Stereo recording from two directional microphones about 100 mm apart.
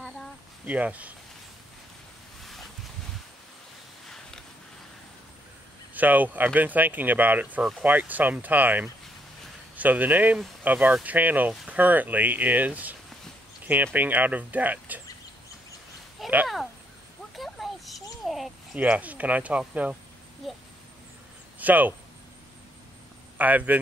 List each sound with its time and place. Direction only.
0.7 s speech: 15° right (ahead or behind)
2.4 s a sound: centre (ahead or behind)
5.9 s speech: 15° right (ahead or behind)
13.9 s speech: 15° right (ahead or behind)
16.2 s speech: centre (ahead or behind)
17.4 s a sound: centre (ahead or behind)
18.8 s speech: 15° right (ahead or behind)
20.4 s speech: centre (ahead or behind)
21.5 s speech: 15° right (ahead or behind)
23.3 s speech: 15° right (ahead or behind)